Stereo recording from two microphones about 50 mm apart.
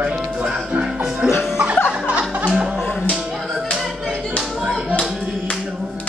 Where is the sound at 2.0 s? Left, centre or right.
Right.